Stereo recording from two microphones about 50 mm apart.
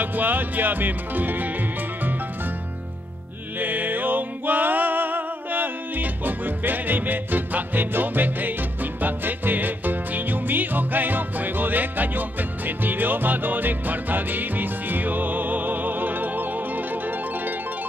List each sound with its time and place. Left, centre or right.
0.0 s music: right
3.5 s music: right